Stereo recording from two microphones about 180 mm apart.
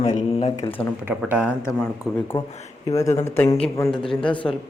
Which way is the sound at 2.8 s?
15° left (ahead or behind).